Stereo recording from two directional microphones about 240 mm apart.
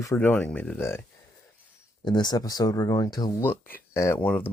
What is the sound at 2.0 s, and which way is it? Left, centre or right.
Speech, centre.